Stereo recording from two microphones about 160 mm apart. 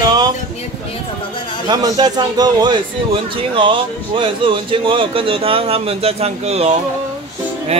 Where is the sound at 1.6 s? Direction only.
25° right (ahead or behind).